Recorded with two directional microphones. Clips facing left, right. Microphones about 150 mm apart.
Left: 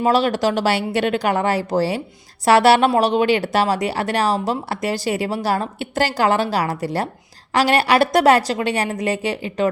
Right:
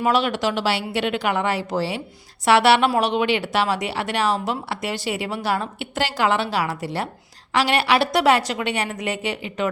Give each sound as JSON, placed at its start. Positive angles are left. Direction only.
{"t": 0.0, "sound": "speech", "side_deg": 35}